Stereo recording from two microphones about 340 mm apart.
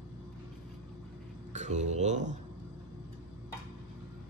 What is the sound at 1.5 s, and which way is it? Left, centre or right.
Speech, right.